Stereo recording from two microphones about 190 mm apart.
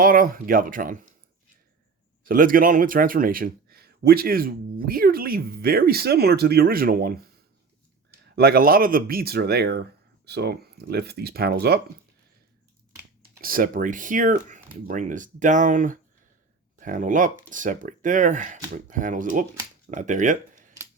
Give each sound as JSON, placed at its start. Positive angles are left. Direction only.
{"t": 0.0, "sound": "speech", "side_deg": -50}
{"t": 2.2, "sound": "speech", "side_deg": -45}
{"t": 8.4, "sound": "speech", "side_deg": -55}
{"t": 13.4, "sound": "speech", "side_deg": -50}